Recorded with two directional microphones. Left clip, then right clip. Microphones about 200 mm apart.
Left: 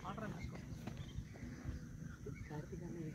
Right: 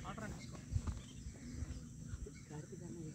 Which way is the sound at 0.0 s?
Centre (ahead or behind).